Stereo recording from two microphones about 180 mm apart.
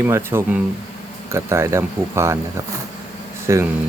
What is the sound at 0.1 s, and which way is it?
Speech, 15° right (ahead or behind).